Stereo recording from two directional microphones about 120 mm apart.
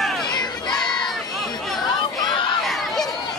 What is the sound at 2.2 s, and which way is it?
Crowd, 40° left (ahead or behind).